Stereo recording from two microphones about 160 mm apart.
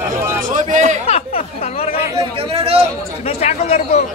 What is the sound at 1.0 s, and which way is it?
Speech, 40° left (ahead or behind).